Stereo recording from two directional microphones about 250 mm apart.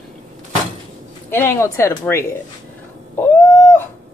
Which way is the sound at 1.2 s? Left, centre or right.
Centre.